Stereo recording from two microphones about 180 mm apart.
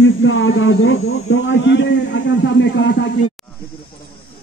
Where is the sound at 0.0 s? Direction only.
90° left.